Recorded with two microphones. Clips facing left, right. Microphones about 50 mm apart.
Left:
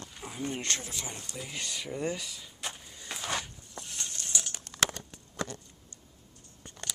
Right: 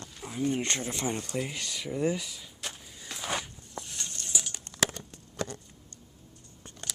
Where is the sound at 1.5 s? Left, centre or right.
Centre.